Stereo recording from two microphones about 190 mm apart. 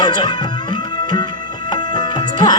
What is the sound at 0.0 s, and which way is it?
Music, 20° left (ahead or behind).